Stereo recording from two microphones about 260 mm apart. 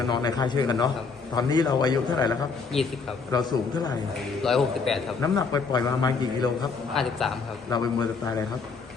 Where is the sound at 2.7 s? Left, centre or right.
Centre.